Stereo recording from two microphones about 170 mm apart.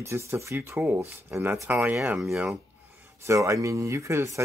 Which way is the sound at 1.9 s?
5° right (ahead or behind).